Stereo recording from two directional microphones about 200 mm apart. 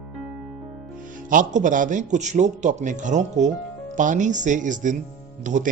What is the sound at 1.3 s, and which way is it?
Speech, 40° right (ahead or behind).